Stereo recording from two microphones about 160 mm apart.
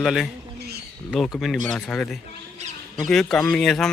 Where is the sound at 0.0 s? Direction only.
Centre (ahead or behind).